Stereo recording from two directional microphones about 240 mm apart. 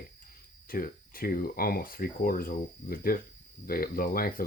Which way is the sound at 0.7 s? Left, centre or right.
Left.